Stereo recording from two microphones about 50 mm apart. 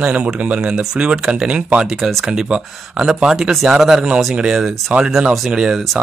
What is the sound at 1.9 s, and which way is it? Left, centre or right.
Speech, centre.